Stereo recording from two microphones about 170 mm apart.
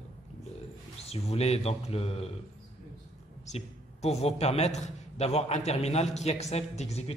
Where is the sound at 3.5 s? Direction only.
40° left (ahead or behind).